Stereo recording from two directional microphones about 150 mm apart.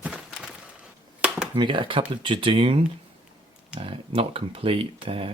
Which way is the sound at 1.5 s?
35° right (ahead or behind).